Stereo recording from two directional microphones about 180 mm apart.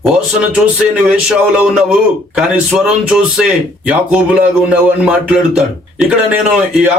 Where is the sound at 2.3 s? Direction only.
5° right (ahead or behind).